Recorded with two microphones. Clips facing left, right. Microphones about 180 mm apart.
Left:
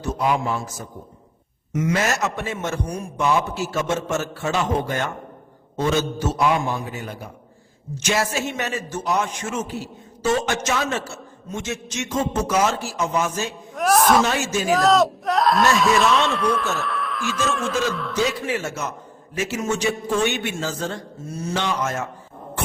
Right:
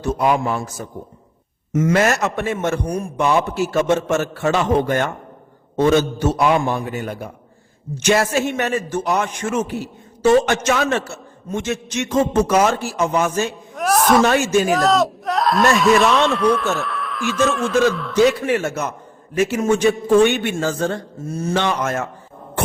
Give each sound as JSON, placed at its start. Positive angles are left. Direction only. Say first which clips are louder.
{"t": 0.0, "sound": "a man's voice", "louder": "right 4 dB", "side_deg": -60}
{"t": 1.7, "sound": "a man's voice", "louder": "right 5 dB", "side_deg": -50}
{"t": 13.7, "sound": "speech", "louder": "right 1 dB", "side_deg": 0}
{"t": 14.3, "sound": "a man's voice", "louder": "right 7 dB", "side_deg": -55}
{"t": 14.7, "sound": "speech", "louder": "even", "side_deg": 0}
{"t": 18.4, "sound": "a man's voice", "louder": "right 6 dB", "side_deg": -60}